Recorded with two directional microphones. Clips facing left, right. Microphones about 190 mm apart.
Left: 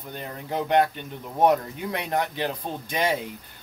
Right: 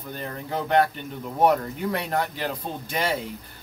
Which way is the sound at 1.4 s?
15° left (ahead or behind).